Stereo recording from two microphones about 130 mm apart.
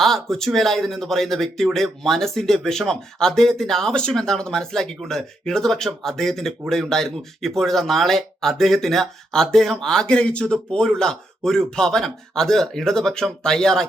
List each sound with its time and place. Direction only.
0.0 s speech: centre (ahead or behind)